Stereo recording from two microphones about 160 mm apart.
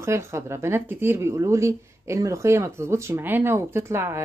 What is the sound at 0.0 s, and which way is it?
Speech, 15° right (ahead or behind).